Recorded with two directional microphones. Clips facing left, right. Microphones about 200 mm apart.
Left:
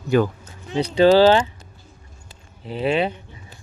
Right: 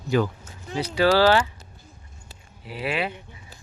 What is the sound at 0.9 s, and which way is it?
Speech, 20° left (ahead or behind).